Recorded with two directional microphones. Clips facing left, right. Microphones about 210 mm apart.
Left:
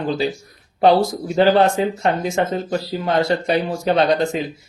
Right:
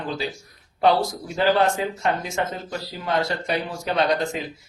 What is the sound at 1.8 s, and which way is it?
Speech, 25° left (ahead or behind).